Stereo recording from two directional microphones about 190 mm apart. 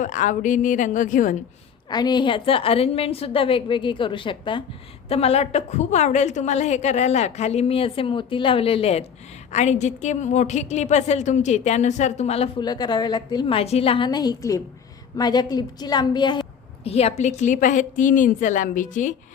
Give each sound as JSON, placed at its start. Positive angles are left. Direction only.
{"t": 0.0, "sound": "a woman's voice", "side_deg": 40}
{"t": 1.9, "sound": "a woman's voice", "side_deg": 20}
{"t": 12.6, "sound": "a woman's voice", "side_deg": 20}